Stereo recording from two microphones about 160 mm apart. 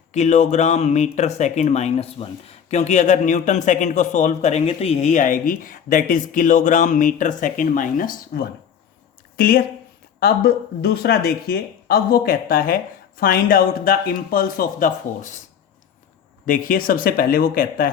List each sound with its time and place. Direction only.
0.1 s speech: 45° left (ahead or behind)
16.5 s speech: 60° left (ahead or behind)